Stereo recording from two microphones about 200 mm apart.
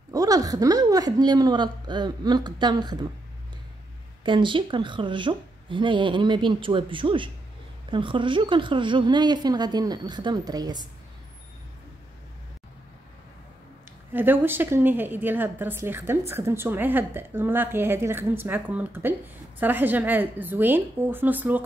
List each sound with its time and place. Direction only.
0.1 s a woman's voice: 20° right (ahead or behind)
4.2 s a woman's voice: 25° right (ahead or behind)
14.1 s a woman's voice: 10° right (ahead or behind)